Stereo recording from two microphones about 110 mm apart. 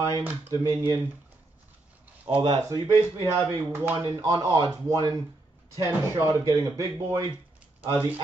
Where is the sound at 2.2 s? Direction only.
50° right (ahead or behind).